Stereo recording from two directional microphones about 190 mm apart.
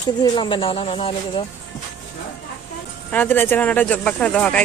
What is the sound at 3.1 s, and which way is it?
Speech, 10° left (ahead or behind).